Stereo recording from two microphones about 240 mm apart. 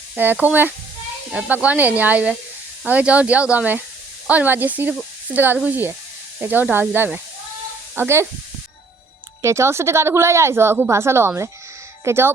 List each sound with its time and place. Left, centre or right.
0.2 s speech: centre
9.4 s speech: centre